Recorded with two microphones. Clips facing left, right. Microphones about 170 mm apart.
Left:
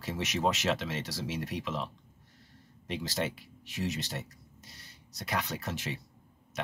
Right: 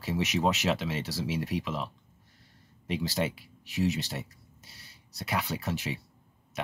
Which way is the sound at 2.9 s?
5° right (ahead or behind).